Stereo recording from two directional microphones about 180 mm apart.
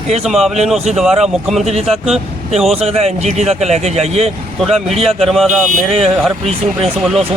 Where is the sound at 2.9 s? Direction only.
35° right (ahead or behind).